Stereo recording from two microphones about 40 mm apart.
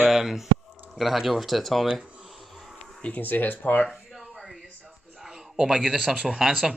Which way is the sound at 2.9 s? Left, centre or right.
Left.